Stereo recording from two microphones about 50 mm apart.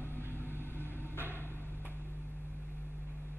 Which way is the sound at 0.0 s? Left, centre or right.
Left.